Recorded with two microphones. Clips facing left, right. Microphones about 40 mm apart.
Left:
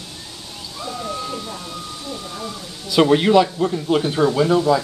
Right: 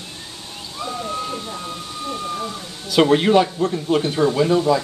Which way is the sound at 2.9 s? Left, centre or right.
Centre.